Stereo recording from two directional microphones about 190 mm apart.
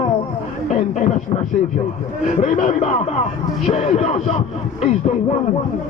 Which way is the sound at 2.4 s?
40° left (ahead or behind).